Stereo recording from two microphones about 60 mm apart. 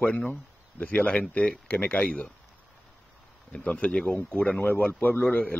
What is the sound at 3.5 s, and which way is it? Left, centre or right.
A man's voice, left.